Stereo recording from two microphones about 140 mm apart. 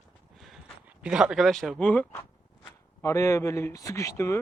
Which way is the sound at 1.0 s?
5° right (ahead or behind).